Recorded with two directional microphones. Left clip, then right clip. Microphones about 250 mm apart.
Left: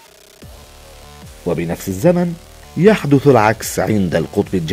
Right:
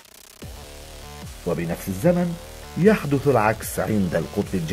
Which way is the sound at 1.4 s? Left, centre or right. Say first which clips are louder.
Left 6 dB; left.